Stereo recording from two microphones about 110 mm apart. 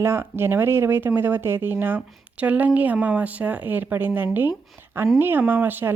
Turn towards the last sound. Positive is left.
turn(degrees=-20)  # may be behind; listen again after turning